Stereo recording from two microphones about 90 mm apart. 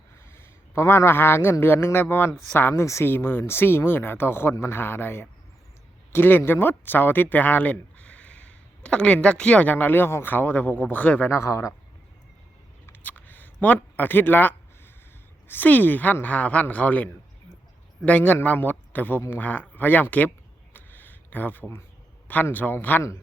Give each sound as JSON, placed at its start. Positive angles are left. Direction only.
{"t": 0.3, "sound": "a man's voice", "side_deg": 25}
{"t": 9.7, "sound": "a man's voice", "side_deg": 25}
{"t": 11.3, "sound": "speech", "side_deg": 35}
{"t": 12.8, "sound": "a sound", "side_deg": 20}
{"t": 15.4, "sound": "a man's voice", "side_deg": 20}
{"t": 20.7, "sound": "a sound", "side_deg": 20}
{"t": 22.3, "sound": "a man's voice", "side_deg": 20}